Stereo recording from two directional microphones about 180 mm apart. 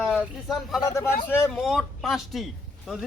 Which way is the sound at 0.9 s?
15° left (ahead or behind).